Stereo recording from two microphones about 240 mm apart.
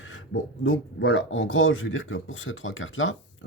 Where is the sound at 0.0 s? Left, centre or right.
Left.